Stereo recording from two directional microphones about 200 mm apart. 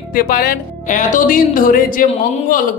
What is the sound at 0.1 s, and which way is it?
Speech, 45° left (ahead or behind).